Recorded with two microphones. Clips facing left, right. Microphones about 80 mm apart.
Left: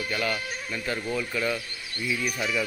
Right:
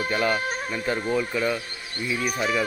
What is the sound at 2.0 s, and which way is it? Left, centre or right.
Speech, right.